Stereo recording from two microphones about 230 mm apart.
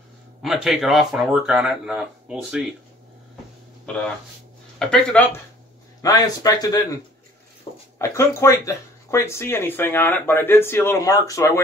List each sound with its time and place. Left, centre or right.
0.4 s speech: centre
3.8 s speech: centre
6.0 s speech: centre
7.7 s dog: left
8.0 s speech: centre